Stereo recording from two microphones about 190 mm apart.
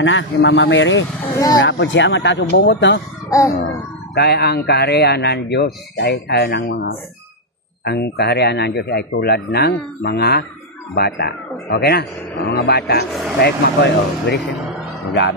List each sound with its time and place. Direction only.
0.0 s a man's voice: 80° left
1.3 s speech: 20° left (ahead or behind)
1.6 s speech: 75° left (ahead or behind)
3.3 s a sound: 15° left (ahead or behind)
4.1 s speech: 55° left (ahead or behind)